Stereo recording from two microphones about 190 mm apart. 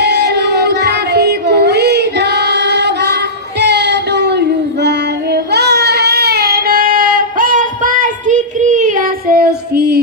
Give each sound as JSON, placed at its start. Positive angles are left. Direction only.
{"t": 0.0, "sound": "child singing", "side_deg": -60}